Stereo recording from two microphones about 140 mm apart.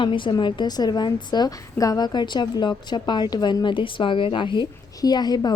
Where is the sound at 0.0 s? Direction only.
35° left (ahead or behind).